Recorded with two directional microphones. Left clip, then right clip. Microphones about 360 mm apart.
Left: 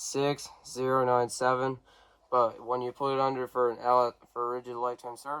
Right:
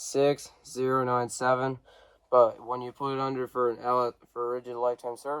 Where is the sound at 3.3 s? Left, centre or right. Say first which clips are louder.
Even; right.